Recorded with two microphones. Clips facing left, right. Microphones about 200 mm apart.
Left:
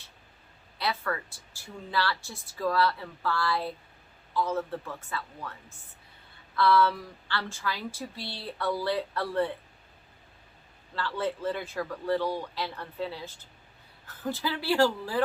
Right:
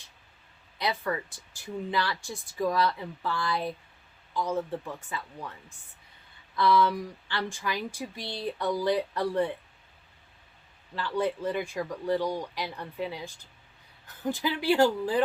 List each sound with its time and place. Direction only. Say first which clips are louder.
0.8 s speech: right 1 dB; 15° right (ahead or behind)
10.9 s speech: right 2 dB; 15° right (ahead or behind)